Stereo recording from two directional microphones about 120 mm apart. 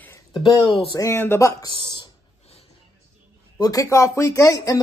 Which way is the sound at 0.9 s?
25° left (ahead or behind).